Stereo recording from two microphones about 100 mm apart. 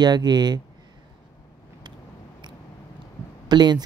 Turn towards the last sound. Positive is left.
turn(degrees=-45)  # may be behind; listen again after turning